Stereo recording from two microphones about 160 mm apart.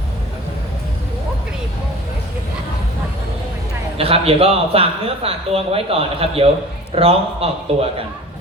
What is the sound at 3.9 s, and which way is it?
A man's voice, 35° right (ahead or behind).